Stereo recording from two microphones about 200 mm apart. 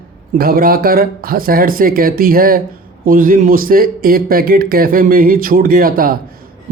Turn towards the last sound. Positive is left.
turn(degrees=-45)  # may be behind; listen again after turning